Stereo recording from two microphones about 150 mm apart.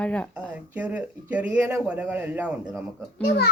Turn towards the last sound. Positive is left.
turn(degrees=90)